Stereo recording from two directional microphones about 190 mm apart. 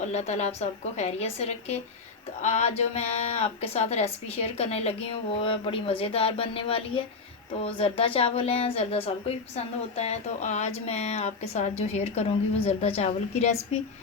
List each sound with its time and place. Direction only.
0.0 s a woman's voice: 35° left (ahead or behind)